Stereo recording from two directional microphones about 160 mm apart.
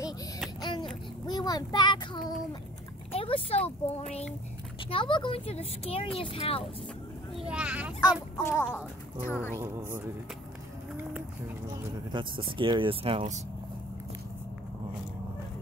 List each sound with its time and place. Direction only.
0.6 s a sound: 25° left (ahead or behind)
1.2 s child singing: 25° left (ahead or behind)
3.1 s speech: 35° left (ahead or behind)
7.3 s speech: 5° right (ahead or behind)
8.4 s a woman's voice: 15° left (ahead or behind)
9.6 s speech: 15° right (ahead or behind)
12.1 s speech: 30° right (ahead or behind)